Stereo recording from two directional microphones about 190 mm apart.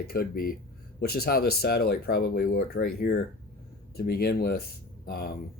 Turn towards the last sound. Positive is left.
turn(degrees=55)  # may be behind; listen again after turning